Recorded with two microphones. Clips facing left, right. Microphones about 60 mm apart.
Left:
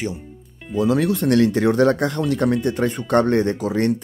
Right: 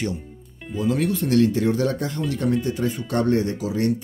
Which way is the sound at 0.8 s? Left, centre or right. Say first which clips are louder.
Left 4 dB; left.